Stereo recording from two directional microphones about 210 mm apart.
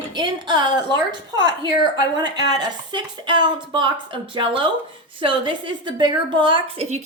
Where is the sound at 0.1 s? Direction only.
20° right (ahead or behind).